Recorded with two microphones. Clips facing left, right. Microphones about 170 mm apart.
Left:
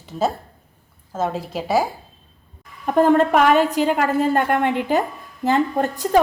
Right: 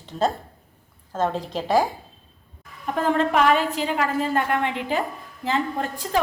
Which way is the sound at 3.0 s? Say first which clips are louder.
Left 6 dB; 50° left (ahead or behind).